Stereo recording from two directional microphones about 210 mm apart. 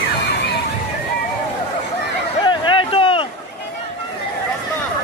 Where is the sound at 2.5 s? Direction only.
25° left (ahead or behind).